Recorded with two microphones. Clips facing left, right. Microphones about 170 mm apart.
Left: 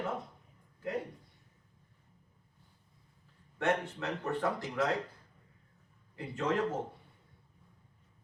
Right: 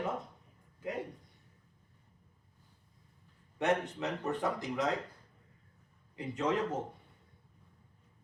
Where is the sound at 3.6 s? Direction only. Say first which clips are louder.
Right 1 dB; 20° right (ahead or behind).